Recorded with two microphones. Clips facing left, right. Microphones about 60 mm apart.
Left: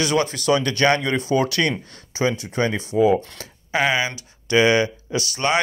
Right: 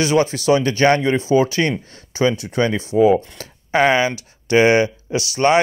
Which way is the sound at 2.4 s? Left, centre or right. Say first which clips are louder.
Right 3 dB; right.